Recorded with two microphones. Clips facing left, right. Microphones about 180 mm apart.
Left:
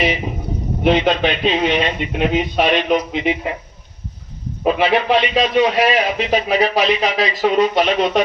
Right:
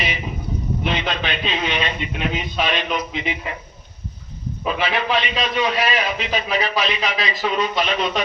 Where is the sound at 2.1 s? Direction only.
60° left (ahead or behind).